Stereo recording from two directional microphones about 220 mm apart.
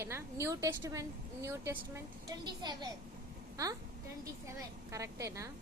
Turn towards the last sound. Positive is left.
turn(degrees=-15)  # may be behind; listen again after turning